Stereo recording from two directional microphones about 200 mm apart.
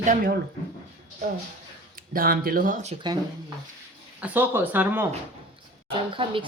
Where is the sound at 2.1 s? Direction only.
45° right (ahead or behind).